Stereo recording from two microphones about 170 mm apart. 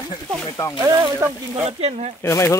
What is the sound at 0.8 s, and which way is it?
Speech, 20° right (ahead or behind).